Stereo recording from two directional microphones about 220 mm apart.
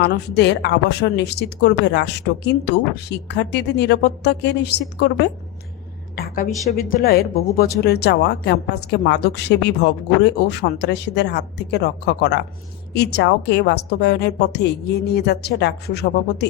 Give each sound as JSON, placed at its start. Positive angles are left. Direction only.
{"t": 0.0, "sound": "a woman's voice", "side_deg": 50}
{"t": 6.1, "sound": "a woman's voice", "side_deg": 40}